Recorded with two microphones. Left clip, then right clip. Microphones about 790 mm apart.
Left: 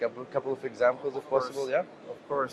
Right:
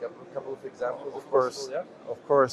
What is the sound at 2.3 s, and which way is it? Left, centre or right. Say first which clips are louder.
Speech: right 9 dB; right.